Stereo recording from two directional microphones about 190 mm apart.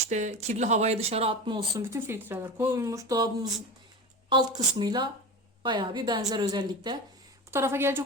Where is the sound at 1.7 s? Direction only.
15° right (ahead or behind).